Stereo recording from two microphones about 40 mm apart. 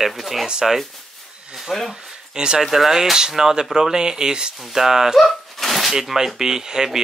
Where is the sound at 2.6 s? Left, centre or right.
Centre.